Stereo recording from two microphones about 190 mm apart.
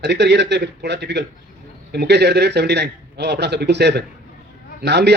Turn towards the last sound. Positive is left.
turn(degrees=-60)  # may be behind; listen again after turning